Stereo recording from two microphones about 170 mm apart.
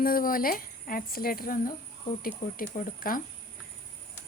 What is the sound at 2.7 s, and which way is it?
Speech, 55° left (ahead or behind).